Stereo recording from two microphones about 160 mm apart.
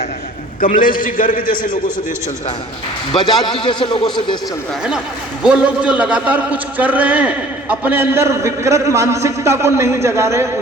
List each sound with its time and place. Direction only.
0.6 s a man's voice: 60° left (ahead or behind)
3.1 s a man's voice: 30° left (ahead or behind)
5.4 s a man's voice: 5° right (ahead or behind)